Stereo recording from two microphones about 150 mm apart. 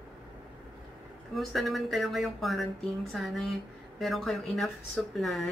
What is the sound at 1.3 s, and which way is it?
Speech, centre (ahead or behind).